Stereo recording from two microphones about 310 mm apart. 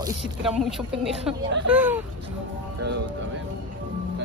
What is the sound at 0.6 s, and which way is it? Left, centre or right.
Speech, centre.